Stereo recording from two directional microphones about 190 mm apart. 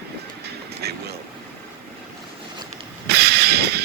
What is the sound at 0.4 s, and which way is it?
Vehicle, 55° right (ahead or behind).